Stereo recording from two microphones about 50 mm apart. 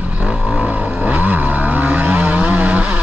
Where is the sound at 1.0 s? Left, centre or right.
Right.